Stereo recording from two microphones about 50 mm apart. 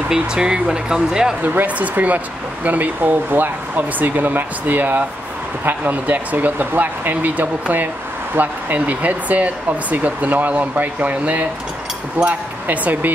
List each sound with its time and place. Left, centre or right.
0.1 s speech: centre
1.4 s speech: right
12.2 s speech: right